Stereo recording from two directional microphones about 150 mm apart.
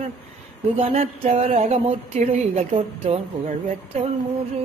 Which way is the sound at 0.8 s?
45° right (ahead or behind).